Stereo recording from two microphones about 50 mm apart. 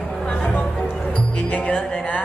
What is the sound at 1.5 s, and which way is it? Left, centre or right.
Music, left.